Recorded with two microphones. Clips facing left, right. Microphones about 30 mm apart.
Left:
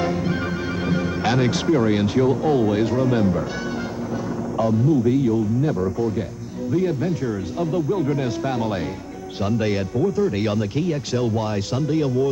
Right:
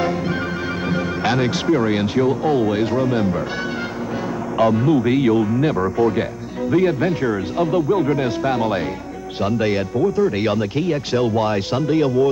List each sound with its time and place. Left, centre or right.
0.0 s music: centre
0.8 s speech: centre
4.6 s speech: right